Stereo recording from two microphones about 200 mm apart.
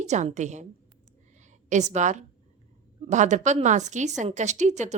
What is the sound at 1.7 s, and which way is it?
A woman's voice, 35° right (ahead or behind).